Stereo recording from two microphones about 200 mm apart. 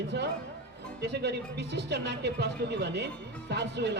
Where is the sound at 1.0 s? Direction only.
55° right (ahead or behind).